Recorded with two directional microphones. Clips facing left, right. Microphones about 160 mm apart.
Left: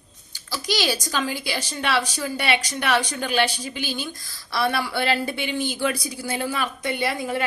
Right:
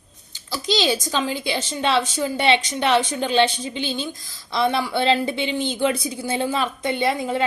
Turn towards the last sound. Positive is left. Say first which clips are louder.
# right 3 dB
turn(degrees=-20)  # may be behind; listen again after turning